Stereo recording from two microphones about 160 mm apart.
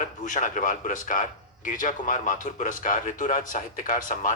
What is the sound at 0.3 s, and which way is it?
A man's voice, 50° left (ahead or behind).